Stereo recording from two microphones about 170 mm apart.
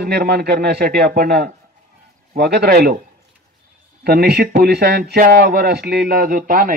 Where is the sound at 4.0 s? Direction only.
70° right (ahead or behind).